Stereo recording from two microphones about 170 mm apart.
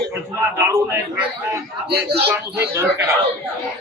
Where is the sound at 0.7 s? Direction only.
20° right (ahead or behind).